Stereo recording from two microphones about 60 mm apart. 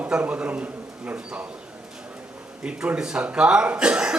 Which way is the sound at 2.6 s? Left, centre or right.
Centre.